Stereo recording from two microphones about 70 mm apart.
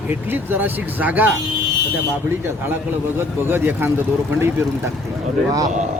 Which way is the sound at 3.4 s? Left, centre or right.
Right.